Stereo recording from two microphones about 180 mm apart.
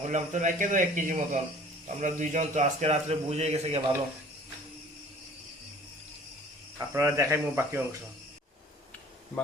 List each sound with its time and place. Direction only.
0.0 s a man's voice: 40° right (ahead or behind)
6.7 s speech: 15° right (ahead or behind)